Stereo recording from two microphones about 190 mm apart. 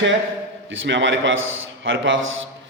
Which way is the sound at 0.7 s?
75° right (ahead or behind).